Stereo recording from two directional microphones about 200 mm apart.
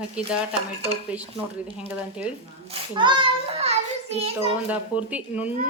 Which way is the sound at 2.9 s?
25° right (ahead or behind).